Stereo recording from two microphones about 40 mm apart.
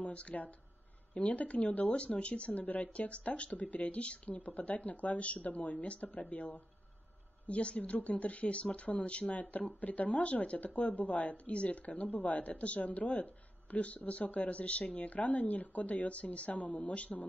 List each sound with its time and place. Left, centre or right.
0.0 s speech: left